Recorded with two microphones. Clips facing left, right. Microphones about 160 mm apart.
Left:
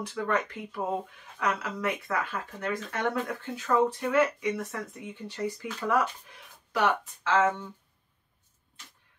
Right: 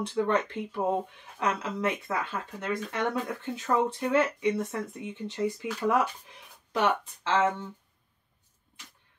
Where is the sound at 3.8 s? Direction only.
25° right (ahead or behind).